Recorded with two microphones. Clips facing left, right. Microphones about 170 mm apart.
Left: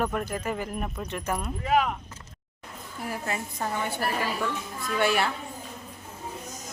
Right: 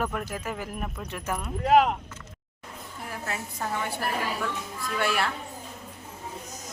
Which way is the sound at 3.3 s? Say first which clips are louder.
Right 1 dB; 5° left (ahead or behind).